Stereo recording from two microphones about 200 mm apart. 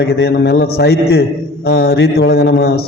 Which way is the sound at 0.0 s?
55° left (ahead or behind).